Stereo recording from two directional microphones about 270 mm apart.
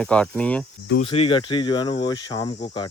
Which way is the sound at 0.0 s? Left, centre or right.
Centre.